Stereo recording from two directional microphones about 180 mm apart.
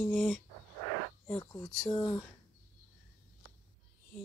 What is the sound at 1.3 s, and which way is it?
Speech, 20° left (ahead or behind).